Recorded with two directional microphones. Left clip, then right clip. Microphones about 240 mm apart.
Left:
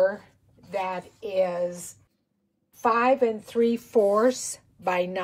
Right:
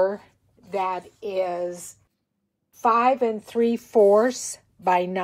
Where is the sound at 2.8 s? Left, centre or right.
Centre.